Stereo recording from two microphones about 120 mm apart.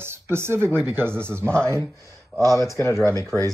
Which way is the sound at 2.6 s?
20° left (ahead or behind).